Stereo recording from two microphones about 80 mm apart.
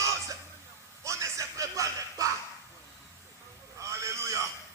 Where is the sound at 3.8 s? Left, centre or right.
Right.